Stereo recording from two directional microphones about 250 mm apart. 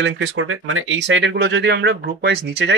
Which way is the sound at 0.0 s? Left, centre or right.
Right.